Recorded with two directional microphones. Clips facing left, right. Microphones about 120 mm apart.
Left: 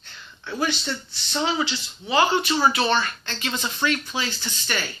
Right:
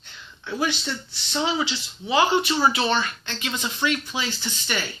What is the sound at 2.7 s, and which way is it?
Speech, 20° right (ahead or behind).